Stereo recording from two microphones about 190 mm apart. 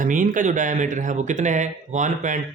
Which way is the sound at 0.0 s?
45° right (ahead or behind).